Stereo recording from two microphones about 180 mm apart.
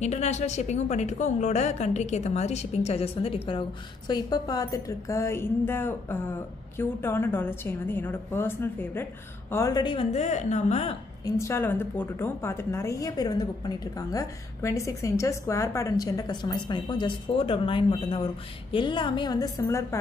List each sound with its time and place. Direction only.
0.0 s a woman's voice: 40° left (ahead or behind)
11.2 s a woman's voice: 15° left (ahead or behind)